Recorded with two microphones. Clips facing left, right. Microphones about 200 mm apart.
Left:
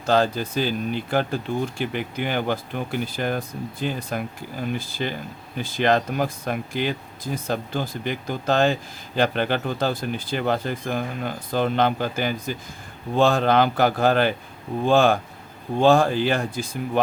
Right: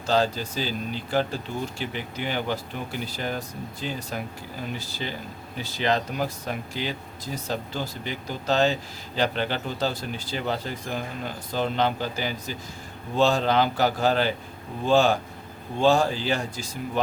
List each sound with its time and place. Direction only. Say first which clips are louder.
0.0 s speech: left 3 dB; 55° left (ahead or behind)